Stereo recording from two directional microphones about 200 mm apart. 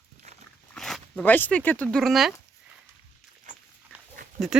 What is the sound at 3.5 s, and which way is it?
Dog, 40° right (ahead or behind).